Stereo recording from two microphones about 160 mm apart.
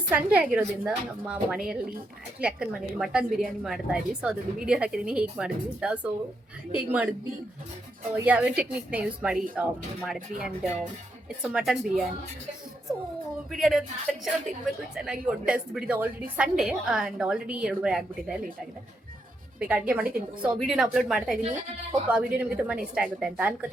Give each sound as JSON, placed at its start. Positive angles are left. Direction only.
{"t": 0.1, "sound": "a woman's voice", "side_deg": -10}
{"t": 3.2, "sound": "a woman's voice", "side_deg": -60}
{"t": 3.6, "sound": "a woman's voice", "side_deg": -5}
{"t": 8.1, "sound": "a woman's voice", "side_deg": -10}
{"t": 13.5, "sound": "a woman's voice", "side_deg": 0}
{"t": 19.5, "sound": "a woman's voice", "side_deg": -10}